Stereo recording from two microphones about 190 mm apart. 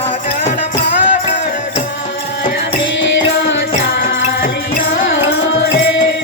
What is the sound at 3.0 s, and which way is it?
Music, 70° left (ahead or behind).